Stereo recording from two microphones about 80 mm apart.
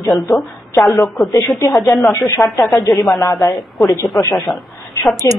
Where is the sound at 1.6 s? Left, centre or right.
Left.